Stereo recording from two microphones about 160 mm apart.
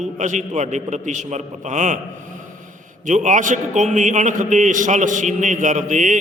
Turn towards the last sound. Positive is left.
turn(degrees=-50)  # may be behind; listen again after turning